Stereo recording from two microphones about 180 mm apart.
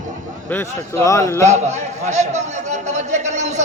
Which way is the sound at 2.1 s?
40° right (ahead or behind).